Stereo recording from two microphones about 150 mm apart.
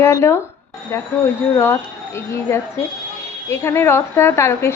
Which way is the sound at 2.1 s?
15° left (ahead or behind).